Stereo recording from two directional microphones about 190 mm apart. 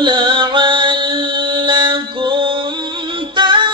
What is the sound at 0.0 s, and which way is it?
Music, 25° right (ahead or behind).